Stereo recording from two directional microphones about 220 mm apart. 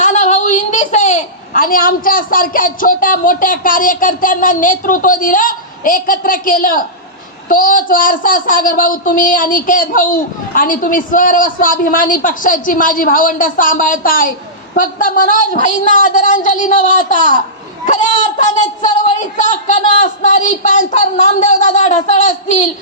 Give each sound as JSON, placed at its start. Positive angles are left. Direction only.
{"t": 0.0, "sound": "a child's voice", "side_deg": 35}